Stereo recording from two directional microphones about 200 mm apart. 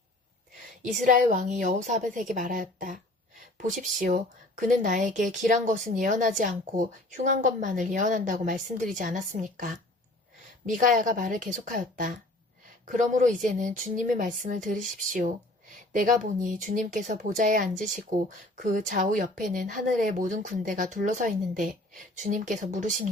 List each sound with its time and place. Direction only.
0.8 s speech: 40° right (ahead or behind)